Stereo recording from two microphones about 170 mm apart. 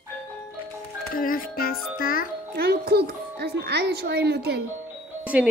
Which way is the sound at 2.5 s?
70° right (ahead or behind).